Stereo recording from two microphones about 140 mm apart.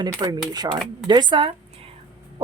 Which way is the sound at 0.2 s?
25° right (ahead or behind).